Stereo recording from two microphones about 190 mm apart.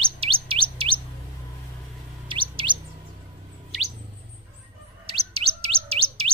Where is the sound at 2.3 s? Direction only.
25° right (ahead or behind).